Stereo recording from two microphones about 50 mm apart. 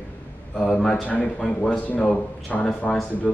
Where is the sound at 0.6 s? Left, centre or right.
Centre.